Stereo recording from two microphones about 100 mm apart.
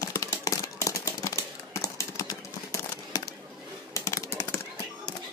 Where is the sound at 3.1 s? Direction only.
40° left (ahead or behind).